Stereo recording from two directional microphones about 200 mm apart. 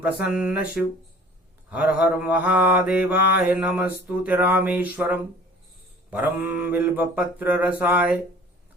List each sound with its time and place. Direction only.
0.3 s mantra: 5° right (ahead or behind)